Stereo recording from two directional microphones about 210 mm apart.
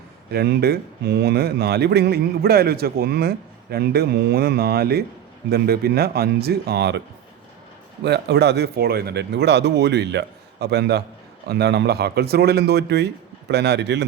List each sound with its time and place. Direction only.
0.3 s speech: 50° right (ahead or behind)
8.0 s speech: 55° right (ahead or behind)